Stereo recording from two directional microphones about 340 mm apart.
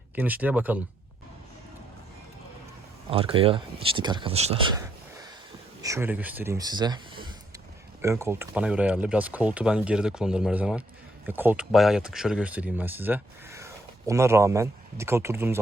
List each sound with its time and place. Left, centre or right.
0.2 s speech: centre
3.1 s speech: centre
5.8 s speech: centre